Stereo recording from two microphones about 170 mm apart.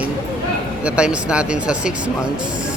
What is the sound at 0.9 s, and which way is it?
Speech, 5° right (ahead or behind).